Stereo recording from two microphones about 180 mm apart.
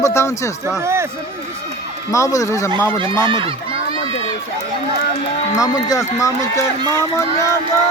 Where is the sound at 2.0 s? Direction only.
15° left (ahead or behind).